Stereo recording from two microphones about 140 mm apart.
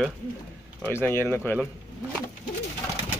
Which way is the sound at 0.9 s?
15° left (ahead or behind).